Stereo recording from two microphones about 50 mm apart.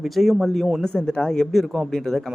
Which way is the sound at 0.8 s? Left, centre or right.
Centre.